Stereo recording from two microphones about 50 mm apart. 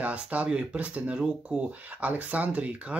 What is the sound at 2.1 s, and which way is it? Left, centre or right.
Speech, right.